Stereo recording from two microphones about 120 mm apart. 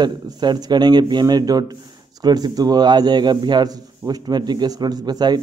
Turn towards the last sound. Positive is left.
turn(degrees=-35)  # may be behind; listen again after turning